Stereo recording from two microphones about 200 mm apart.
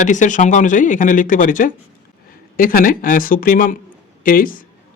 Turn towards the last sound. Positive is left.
turn(degrees=45)  # may be behind; listen again after turning